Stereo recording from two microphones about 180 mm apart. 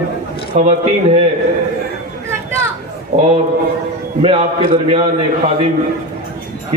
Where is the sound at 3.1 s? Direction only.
40° right (ahead or behind).